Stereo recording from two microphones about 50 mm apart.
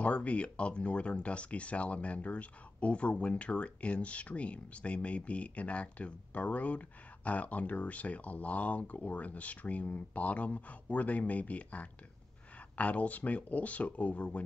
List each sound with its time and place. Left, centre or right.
0.0 s speech: left